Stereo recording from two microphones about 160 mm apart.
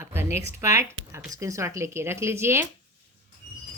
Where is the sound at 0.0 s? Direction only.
15° right (ahead or behind).